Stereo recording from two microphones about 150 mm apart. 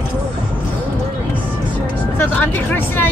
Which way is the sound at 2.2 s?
15° left (ahead or behind).